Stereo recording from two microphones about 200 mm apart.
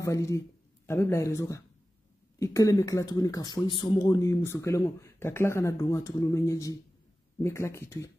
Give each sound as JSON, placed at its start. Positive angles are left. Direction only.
{"t": 0.0, "sound": "speech", "side_deg": 15}